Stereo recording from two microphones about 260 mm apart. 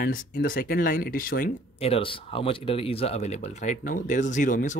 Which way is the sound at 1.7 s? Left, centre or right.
Left.